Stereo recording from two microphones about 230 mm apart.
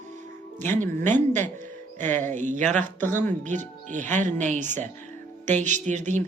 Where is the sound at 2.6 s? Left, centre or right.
Centre.